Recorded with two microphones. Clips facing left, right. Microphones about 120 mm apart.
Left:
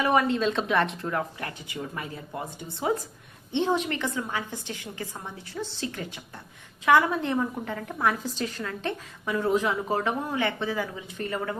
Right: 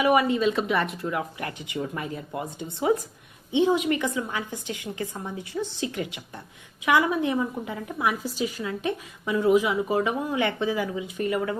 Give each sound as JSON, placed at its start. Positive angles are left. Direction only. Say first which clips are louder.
{"t": 0.0, "sound": "speech", "louder": "right 2 dB", "side_deg": -10}
{"t": 1.4, "sound": "a woman's voice", "louder": "right 4 dB", "side_deg": -20}